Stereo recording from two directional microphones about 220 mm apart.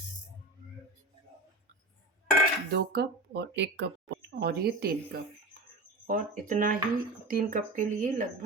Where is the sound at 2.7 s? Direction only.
45° right (ahead or behind).